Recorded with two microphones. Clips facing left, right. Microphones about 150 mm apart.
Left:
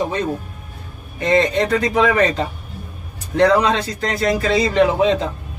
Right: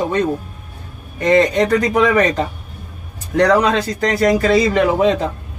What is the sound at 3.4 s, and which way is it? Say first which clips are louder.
Speech: even; 50° right (ahead or behind).